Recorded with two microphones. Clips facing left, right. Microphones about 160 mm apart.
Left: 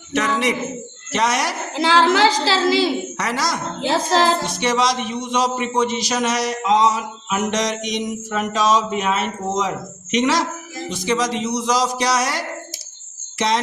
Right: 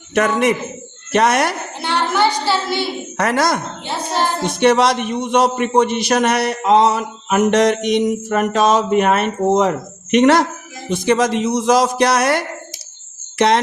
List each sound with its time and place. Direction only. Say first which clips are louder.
0.1 s a man's voice: right 5 dB; 50° right (ahead or behind)
1.7 s a woman's voice: left 4 dB; 90° left
3.2 s a man's voice: right 6 dB; 55° right (ahead or behind)
3.8 s a woman's voice: left 3 dB; 90° left
4.4 s a man's voice: right 6 dB; 60° right (ahead or behind)